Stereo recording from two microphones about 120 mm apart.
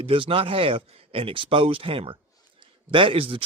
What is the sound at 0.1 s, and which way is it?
A man's voice, 50° right (ahead or behind).